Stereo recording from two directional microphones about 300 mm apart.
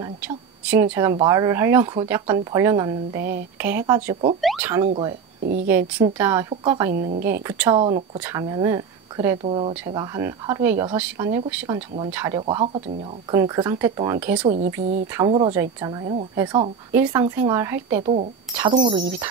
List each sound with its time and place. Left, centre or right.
0.9 s speech: centre
4.4 s speech: centre
6.9 s a woman's voice: right
7.4 s speech: centre
14.4 s a woman's voice: right
18.0 s a woman's voice: right